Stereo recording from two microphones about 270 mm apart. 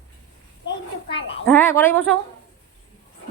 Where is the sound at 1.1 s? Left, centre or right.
Left.